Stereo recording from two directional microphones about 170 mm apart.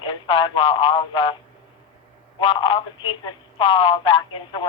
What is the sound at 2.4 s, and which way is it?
A woman's voice, 30° left (ahead or behind).